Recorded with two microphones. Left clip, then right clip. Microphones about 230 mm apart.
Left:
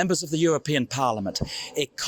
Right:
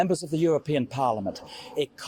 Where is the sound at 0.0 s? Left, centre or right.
Left.